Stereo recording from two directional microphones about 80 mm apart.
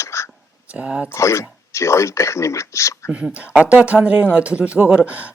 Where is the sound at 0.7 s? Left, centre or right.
Centre.